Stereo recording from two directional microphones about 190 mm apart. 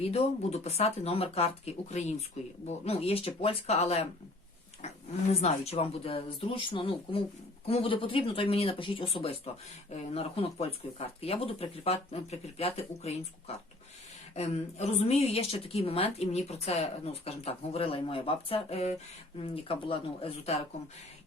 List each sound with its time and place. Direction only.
0.0 s a woman's voice: 35° left (ahead or behind)
5.3 s a woman's voice: 35° left (ahead or behind)
14.3 s a woman's voice: 35° left (ahead or behind)